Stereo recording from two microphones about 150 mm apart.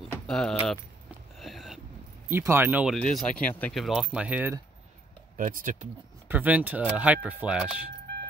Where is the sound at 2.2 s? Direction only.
15° right (ahead or behind).